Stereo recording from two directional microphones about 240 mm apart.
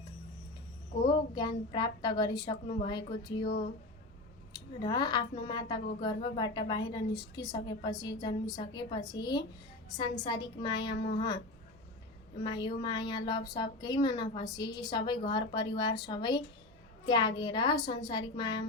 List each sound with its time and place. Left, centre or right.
1.4 s a woman's voice: centre
4.5 s a woman's voice: centre
12.4 s a woman's voice: centre